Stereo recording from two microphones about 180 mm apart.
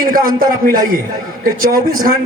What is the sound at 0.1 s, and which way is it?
A man's voice, 50° right (ahead or behind).